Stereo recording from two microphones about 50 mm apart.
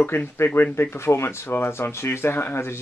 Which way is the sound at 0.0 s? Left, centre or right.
Left.